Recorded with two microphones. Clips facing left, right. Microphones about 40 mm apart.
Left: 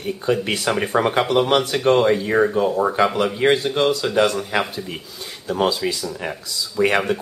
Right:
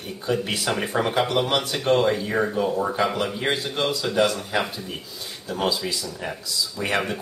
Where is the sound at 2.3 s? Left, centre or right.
Centre.